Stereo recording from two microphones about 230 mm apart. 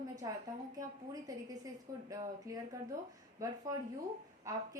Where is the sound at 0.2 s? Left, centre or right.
Centre.